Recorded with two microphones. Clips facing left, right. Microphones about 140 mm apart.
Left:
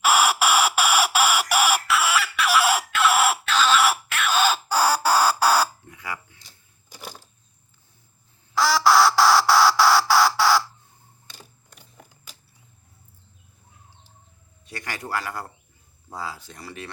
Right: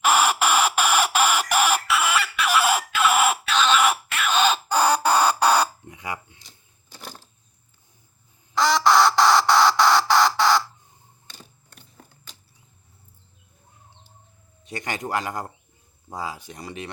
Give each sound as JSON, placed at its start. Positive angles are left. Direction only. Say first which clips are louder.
{"t": 0.0, "sound": "a sound", "louder": "even", "side_deg": 5}
{"t": 3.4, "sound": "chicken", "louder": "even", "side_deg": 0}
{"t": 5.9, "sound": "dishes", "louder": "right 2 dB", "side_deg": -20}
{"t": 8.5, "sound": "chicken", "louder": "even", "side_deg": 5}
{"t": 11.3, "sound": "a sound", "louder": "even", "side_deg": 10}
{"t": 14.6, "sound": "speech", "louder": "right 4 dB", "side_deg": -20}